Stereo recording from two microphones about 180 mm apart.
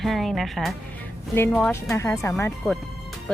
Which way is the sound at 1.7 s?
15° left (ahead or behind).